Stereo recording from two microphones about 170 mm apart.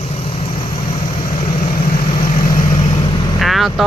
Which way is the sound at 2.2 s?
55° left (ahead or behind).